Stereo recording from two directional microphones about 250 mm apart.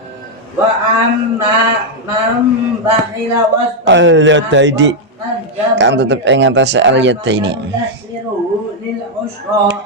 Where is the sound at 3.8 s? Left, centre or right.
Right.